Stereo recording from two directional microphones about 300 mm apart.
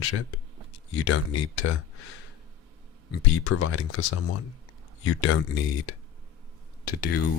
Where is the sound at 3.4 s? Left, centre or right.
Left.